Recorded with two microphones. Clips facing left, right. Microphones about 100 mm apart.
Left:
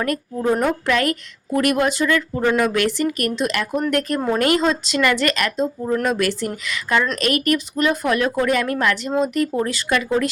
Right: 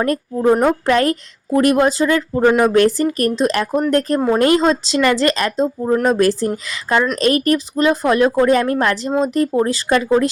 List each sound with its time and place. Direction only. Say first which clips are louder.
0.5 s a woman's voice: right 4 dB; 30° right (ahead or behind)